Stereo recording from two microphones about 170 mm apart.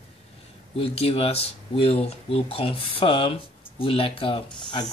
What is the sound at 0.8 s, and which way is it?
Speech, 35° left (ahead or behind).